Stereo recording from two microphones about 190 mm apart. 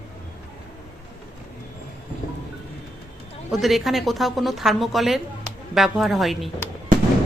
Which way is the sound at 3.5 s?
Centre (ahead or behind).